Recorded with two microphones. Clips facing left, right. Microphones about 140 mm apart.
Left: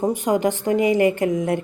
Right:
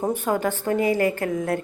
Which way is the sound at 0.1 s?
15° left (ahead or behind).